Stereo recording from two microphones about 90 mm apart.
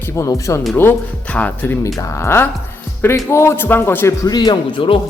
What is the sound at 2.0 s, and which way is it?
Speech, 30° left (ahead or behind).